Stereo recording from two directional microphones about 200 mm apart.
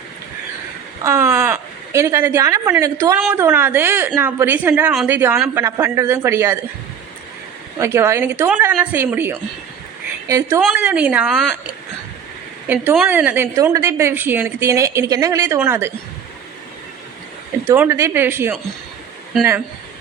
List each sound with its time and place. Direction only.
1.0 s a woman's voice: 10° right (ahead or behind)
7.8 s a woman's voice: 15° right (ahead or behind)
10.6 s a woman's voice: 5° right (ahead or behind)
12.6 s a woman's voice: 10° right (ahead or behind)
17.7 s a woman's voice: 15° right (ahead or behind)